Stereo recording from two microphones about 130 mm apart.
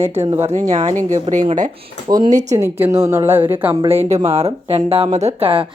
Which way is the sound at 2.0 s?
30° right (ahead or behind).